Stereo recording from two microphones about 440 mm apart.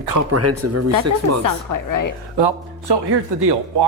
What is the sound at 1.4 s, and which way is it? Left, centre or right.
Speech, left.